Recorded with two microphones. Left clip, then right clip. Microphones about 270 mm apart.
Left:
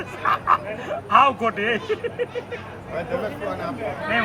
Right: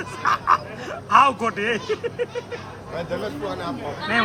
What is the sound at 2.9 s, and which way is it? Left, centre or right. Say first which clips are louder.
Speech: left 1 dB; right.